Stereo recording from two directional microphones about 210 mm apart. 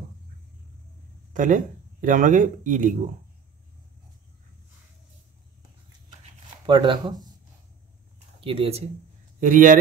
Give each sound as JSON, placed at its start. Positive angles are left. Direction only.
{"t": 1.3, "sound": "speech", "side_deg": -40}
{"t": 6.6, "sound": "speech", "side_deg": -20}
{"t": 8.4, "sound": "speech", "side_deg": -25}
{"t": 9.4, "sound": "speech", "side_deg": -40}